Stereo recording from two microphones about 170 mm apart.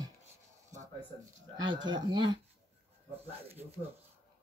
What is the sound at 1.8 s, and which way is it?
Speech, 25° right (ahead or behind).